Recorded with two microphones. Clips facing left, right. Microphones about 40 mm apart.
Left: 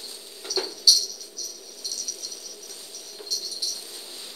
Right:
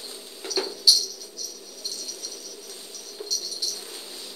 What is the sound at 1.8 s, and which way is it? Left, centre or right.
Rattle, right.